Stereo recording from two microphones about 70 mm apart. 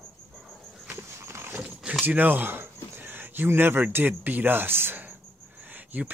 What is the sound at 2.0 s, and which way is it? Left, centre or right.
Speech, right.